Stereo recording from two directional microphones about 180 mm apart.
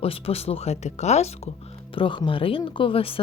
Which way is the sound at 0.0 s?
35° left (ahead or behind).